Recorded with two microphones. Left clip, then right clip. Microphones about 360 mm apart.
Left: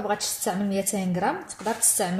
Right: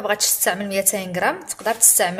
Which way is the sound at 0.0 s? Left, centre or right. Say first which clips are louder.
Right 6 dB; right.